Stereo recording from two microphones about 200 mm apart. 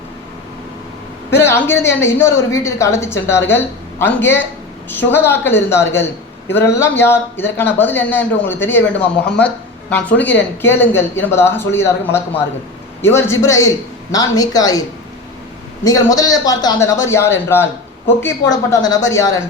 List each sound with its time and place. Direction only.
1.3 s a woman's voice: 10° left (ahead or behind)